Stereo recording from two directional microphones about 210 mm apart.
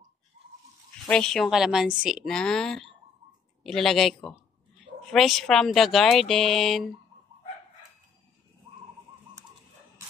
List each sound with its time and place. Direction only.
1.0 s speech: 5° left (ahead or behind)